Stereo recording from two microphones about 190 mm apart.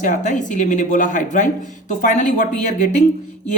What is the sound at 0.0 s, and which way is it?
Speech, 40° left (ahead or behind).